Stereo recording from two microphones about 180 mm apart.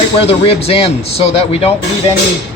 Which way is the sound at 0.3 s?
35° left (ahead or behind).